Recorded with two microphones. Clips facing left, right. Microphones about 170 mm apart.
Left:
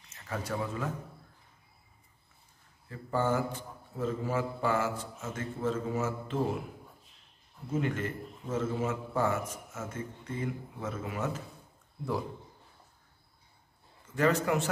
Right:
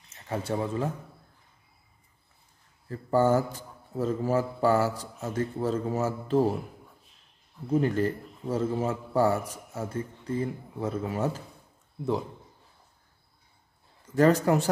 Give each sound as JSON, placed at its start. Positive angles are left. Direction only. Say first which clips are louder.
{"t": 0.2, "sound": "speech", "louder": "right 5 dB", "side_deg": -30}
{"t": 2.9, "sound": "a man's voice", "louder": "right 7 dB", "side_deg": -40}
{"t": 7.7, "sound": "a man's voice", "louder": "right 7 dB", "side_deg": -35}
{"t": 14.1, "sound": "a man's voice", "louder": "right 6 dB", "side_deg": -40}